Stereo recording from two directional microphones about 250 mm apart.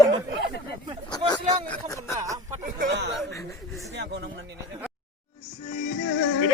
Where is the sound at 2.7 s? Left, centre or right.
Right.